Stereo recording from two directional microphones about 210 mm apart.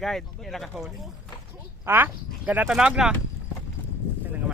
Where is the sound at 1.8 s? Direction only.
10° right (ahead or behind).